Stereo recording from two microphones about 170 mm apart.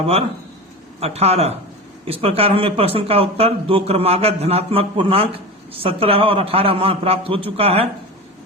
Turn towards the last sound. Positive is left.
turn(degrees=-35)  # may be behind; listen again after turning